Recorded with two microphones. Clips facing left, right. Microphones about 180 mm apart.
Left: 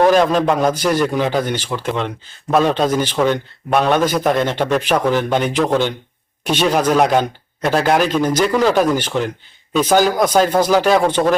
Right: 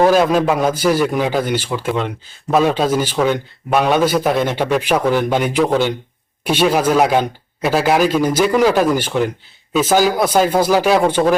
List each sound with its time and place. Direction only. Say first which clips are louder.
0.0 s a man's voice: even; 5° right (ahead or behind)